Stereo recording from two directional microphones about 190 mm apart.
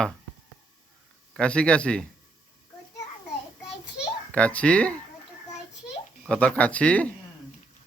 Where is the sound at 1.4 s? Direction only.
5° left (ahead or behind).